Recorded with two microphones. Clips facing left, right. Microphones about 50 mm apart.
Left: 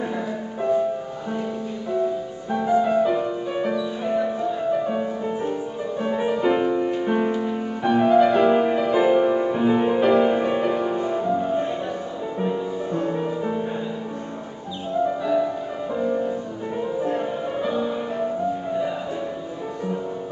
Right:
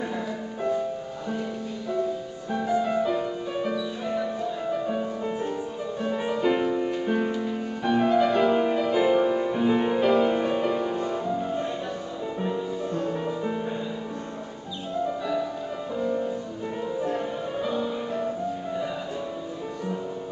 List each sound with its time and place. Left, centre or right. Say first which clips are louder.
0.6 s music: left 6 dB; centre
2.5 s music: left 5 dB; centre
15.2 s music: left 6 dB; centre